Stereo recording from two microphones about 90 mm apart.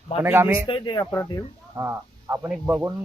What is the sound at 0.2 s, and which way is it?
Speech, 25° right (ahead or behind).